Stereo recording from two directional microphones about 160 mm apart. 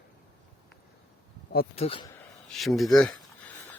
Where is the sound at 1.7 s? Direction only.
35° left (ahead or behind).